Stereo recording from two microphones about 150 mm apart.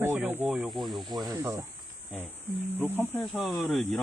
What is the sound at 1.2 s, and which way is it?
Cricket, 25° right (ahead or behind).